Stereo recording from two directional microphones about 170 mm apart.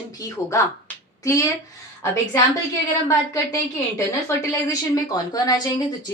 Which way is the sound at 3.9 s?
20° left (ahead or behind).